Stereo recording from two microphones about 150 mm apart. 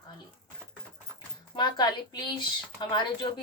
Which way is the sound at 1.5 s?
30° left (ahead or behind).